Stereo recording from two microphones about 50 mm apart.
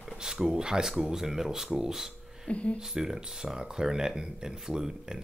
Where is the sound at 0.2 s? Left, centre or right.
Centre.